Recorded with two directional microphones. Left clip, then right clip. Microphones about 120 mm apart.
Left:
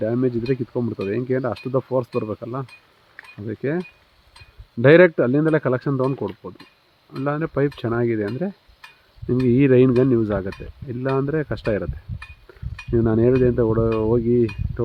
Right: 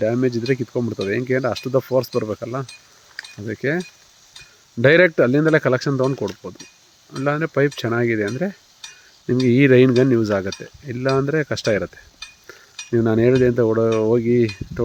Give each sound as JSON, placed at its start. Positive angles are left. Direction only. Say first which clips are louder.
{"t": 0.0, "sound": "speech", "louder": "right 2 dB", "side_deg": -20}
{"t": 12.9, "sound": "speech", "louder": "right 2 dB", "side_deg": -20}